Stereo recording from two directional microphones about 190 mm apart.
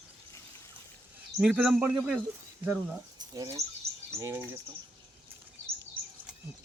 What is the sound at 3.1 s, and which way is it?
Bird, 20° right (ahead or behind).